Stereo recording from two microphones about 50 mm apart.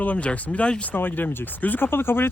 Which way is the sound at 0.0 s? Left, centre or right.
Left.